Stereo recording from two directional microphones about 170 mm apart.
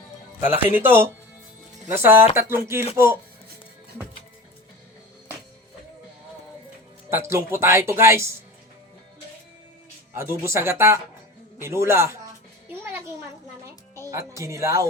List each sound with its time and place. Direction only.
0.3 s speech: 10° right (ahead or behind)
7.1 s speech: 15° right (ahead or behind)
10.2 s speech: 15° right (ahead or behind)
12.6 s music: 15° right (ahead or behind)
14.1 s speech: 20° right (ahead or behind)